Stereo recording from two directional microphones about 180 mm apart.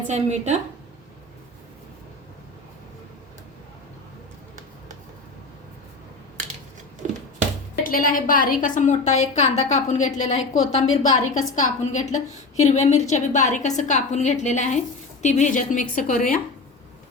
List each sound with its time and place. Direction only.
0.1 s a woman's voice: 40° right (ahead or behind)
7.0 s a sound: 40° right (ahead or behind)
7.9 s a woman's voice: 50° left (ahead or behind)